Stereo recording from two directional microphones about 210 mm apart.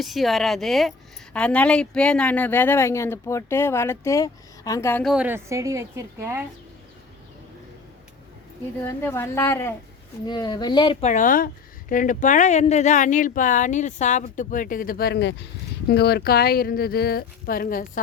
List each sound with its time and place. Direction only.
0.0 s speech: centre (ahead or behind)
5.0 s a woman's voice: 5° right (ahead or behind)
8.8 s speech: 10° left (ahead or behind)
11.0 s speech: 35° left (ahead or behind)